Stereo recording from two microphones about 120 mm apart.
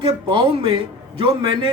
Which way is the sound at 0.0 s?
45° right (ahead or behind).